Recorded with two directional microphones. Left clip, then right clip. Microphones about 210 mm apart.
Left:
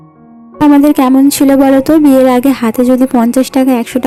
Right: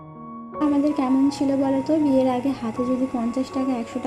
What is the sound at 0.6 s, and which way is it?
Speech, 35° left (ahead or behind).